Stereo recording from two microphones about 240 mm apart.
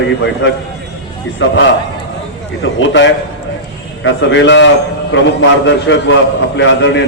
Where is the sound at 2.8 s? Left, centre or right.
Left.